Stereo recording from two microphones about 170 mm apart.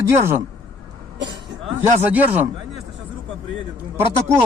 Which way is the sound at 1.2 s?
90° right.